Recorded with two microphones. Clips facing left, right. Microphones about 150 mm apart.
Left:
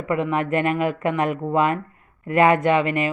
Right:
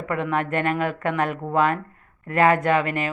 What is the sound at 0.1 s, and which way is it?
Speech, 5° left (ahead or behind).